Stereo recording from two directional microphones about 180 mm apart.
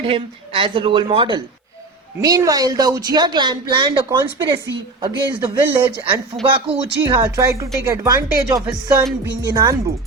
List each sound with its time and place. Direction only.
0.0 s speech: 30° right (ahead or behind)